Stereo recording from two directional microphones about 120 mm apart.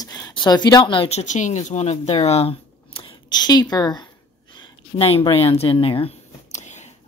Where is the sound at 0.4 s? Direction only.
35° left (ahead or behind).